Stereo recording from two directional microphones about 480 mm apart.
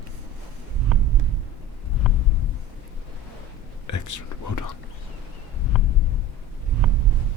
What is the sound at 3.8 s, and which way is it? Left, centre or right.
Whispering, left.